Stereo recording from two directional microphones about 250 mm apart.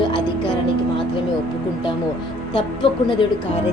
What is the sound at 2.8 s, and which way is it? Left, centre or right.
Speech, left.